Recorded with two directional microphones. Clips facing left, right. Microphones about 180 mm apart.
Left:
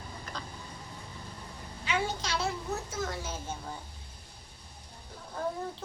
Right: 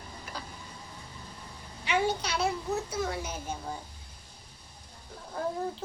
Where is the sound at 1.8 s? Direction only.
15° right (ahead or behind).